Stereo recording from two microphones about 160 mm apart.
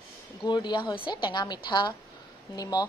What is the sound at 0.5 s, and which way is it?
A woman's voice, 25° left (ahead or behind).